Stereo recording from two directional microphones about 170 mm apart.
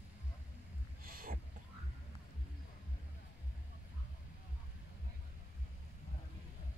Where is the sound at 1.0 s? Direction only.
55° right (ahead or behind).